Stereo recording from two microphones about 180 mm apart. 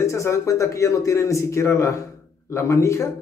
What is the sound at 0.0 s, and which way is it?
A man's voice, 15° left (ahead or behind).